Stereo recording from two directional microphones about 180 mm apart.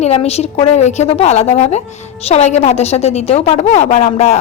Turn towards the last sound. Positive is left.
turn(degrees=40)  # may be behind; listen again after turning